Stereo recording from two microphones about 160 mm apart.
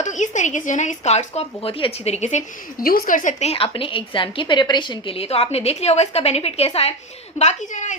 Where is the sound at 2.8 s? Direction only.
65° left (ahead or behind).